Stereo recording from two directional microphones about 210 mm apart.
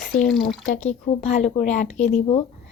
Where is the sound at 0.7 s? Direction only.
30° left (ahead or behind).